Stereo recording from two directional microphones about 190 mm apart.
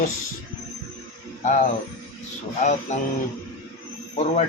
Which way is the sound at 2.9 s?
40° left (ahead or behind).